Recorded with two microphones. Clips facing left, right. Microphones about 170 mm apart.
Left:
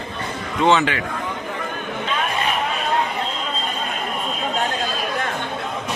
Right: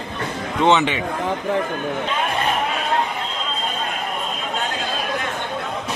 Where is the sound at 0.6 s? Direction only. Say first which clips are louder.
Even; 20° right (ahead or behind).